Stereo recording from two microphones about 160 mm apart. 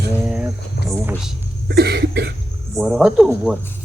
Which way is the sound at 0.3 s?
5° right (ahead or behind).